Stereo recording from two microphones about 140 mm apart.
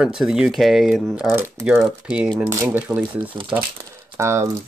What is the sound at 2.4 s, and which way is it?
Speech, 20° right (ahead or behind).